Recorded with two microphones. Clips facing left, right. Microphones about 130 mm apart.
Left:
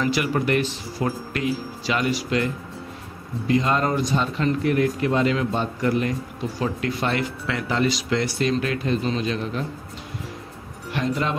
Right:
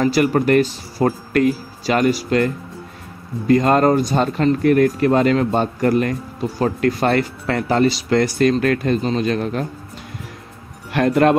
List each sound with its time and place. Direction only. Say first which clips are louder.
0.0 s speech: right 7 dB; 45° right (ahead or behind)
10.9 s speech: right 10 dB; 60° right (ahead or behind)